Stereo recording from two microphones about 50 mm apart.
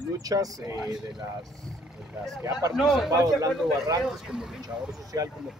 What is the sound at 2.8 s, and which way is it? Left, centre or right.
Speech, centre.